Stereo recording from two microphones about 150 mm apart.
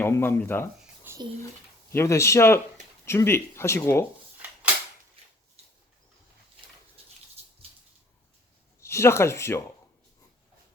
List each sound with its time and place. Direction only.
0.0 s speech: 15° left (ahead or behind)
1.1 s a sound: 15° right (ahead or behind)
1.9 s speech: 20° left (ahead or behind)
8.8 s speech: 20° left (ahead or behind)